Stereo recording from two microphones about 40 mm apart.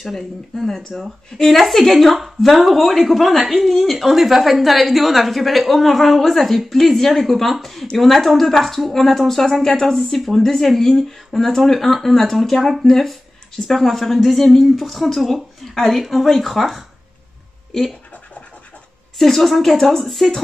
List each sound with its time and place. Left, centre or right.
0.0 s speech: centre
19.1 s speech: centre